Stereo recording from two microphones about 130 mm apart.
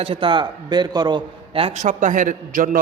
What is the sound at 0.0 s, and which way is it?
A man's voice, 45° right (ahead or behind).